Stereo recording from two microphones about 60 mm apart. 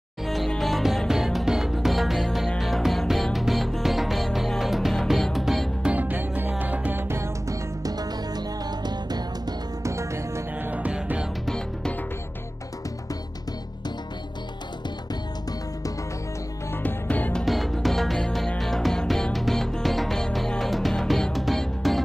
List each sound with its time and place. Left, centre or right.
0.2 s music: centre
5.8 s music: right
7.0 s music: right
7.4 s music: right
9.8 s music: right
10.6 s music: right
11.4 s music: centre
16.7 s music: left
17.5 s music: centre